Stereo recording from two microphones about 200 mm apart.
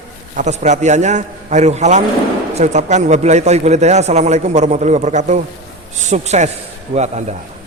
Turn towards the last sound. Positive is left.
turn(degrees=-35)  # may be behind; listen again after turning